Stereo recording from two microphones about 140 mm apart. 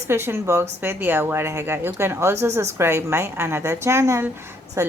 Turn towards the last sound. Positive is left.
turn(degrees=-20)  # may be behind; listen again after turning